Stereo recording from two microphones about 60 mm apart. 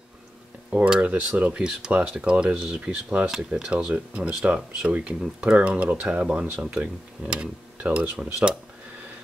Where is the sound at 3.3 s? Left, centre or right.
Centre.